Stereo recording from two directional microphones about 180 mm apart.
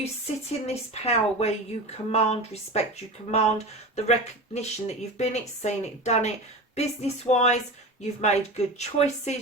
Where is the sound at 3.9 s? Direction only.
35° left (ahead or behind).